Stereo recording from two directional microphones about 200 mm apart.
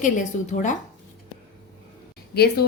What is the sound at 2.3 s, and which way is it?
Speech, 50° left (ahead or behind).